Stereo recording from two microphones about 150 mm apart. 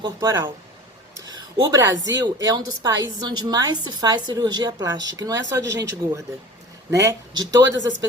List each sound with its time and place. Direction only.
0.2 s a woman's voice: 20° right (ahead or behind)